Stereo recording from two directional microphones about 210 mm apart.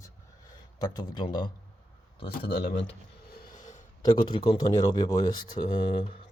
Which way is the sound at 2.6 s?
60° left (ahead or behind).